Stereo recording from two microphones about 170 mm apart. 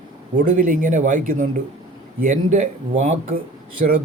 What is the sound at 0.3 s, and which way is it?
Speech, 50° right (ahead or behind).